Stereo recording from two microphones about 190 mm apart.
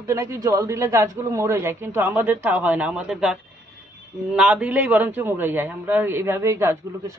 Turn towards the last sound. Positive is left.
turn(degrees=-15)  # may be behind; listen again after turning